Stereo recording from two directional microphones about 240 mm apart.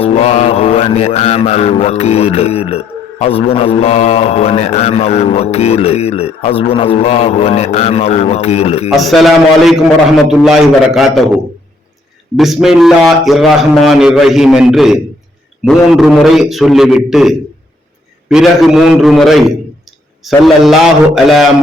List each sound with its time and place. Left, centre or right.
0.0 s mantra: left
8.9 s a man's voice: centre
12.4 s a man's voice: centre